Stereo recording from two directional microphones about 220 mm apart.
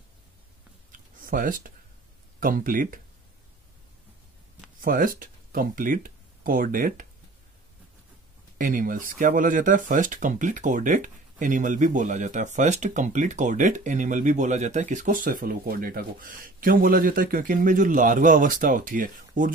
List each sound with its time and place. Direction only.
0.9 s a sound: 40° right (ahead or behind)
2.4 s speech: 40° right (ahead or behind)
4.8 s speech: 40° right (ahead or behind)
8.5 s speech: 40° right (ahead or behind)